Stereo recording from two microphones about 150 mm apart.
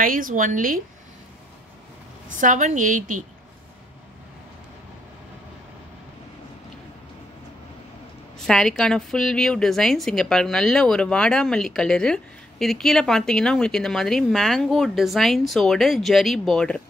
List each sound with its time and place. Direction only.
0.0 s a woman's voice: 65° right (ahead or behind)
2.4 s a woman's voice: 55° right (ahead or behind)
8.5 s a woman's voice: 5° left (ahead or behind)